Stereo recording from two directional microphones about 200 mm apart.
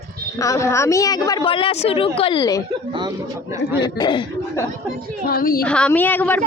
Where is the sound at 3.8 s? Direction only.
25° left (ahead or behind).